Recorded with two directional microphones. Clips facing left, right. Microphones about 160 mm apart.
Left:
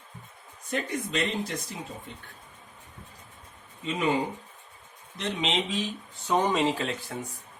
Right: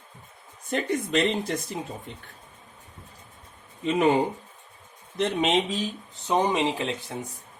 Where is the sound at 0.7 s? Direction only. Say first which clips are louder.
Right 5 dB; 60° right (ahead or behind).